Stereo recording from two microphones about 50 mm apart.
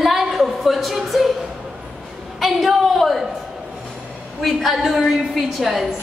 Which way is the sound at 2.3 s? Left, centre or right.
Centre.